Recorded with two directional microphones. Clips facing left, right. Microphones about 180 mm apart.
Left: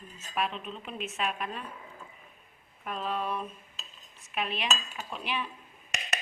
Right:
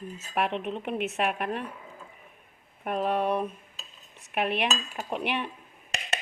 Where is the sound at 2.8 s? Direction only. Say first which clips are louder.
Right 7 dB; 55° right (ahead or behind).